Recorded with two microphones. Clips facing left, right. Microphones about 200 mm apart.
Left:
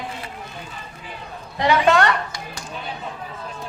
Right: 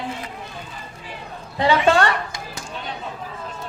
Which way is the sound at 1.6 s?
30° right (ahead or behind).